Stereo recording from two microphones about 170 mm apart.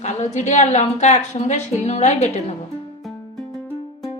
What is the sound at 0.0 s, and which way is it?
Speech, 45° left (ahead or behind).